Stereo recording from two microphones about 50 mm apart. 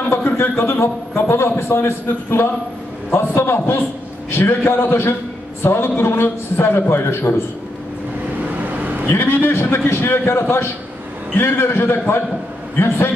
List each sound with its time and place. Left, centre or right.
0.1 s a man's voice: left
8.5 s vehicle: right
9.0 s a man's voice: left